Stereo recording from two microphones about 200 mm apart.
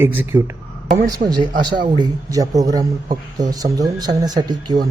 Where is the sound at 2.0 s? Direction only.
20° right (ahead or behind).